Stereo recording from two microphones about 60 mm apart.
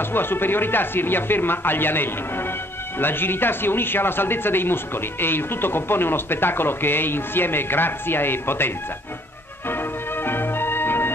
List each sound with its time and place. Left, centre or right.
0.1 s speech: left
10.2 s music: left